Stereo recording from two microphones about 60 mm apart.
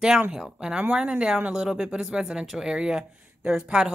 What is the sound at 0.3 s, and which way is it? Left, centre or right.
Speech, centre.